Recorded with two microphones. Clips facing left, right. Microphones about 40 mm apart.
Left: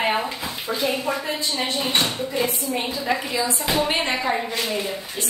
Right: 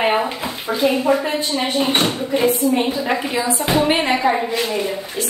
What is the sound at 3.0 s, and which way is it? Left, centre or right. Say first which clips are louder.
Speech: right 4 dB; right.